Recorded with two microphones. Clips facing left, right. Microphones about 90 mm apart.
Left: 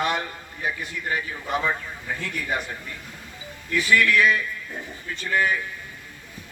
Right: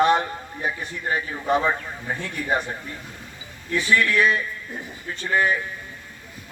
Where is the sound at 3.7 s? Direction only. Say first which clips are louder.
Even; 30° right (ahead or behind).